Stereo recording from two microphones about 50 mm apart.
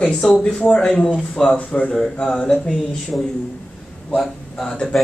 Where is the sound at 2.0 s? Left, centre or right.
Centre.